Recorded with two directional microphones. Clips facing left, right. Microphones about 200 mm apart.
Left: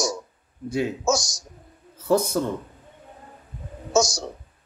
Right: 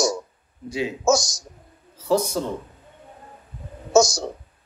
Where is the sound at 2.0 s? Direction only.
55° left (ahead or behind).